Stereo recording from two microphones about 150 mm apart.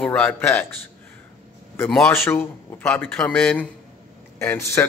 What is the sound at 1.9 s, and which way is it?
Speech, 15° left (ahead or behind).